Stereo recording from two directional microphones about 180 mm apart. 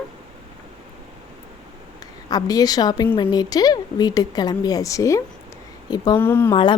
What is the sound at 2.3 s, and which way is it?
Speech, 20° left (ahead or behind).